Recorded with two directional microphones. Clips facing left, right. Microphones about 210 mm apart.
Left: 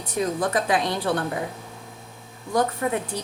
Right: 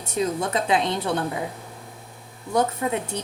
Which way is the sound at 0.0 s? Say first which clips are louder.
Even; 25° right (ahead or behind).